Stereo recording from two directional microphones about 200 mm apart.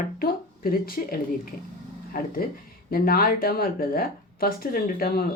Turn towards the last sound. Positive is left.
turn(degrees=50)  # may be behind; listen again after turning